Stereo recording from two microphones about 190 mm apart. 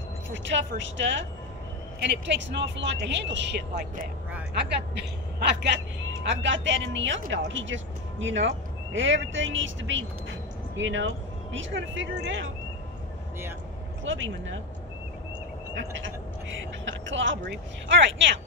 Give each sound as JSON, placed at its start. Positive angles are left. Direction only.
{"t": 0.3, "sound": "speech", "side_deg": -75}
{"t": 3.7, "sound": "speech", "side_deg": -45}
{"t": 4.6, "sound": "a woman's voice", "side_deg": -65}
{"t": 14.0, "sound": "a woman's voice", "side_deg": -85}
{"t": 15.7, "sound": "a woman's voice", "side_deg": -80}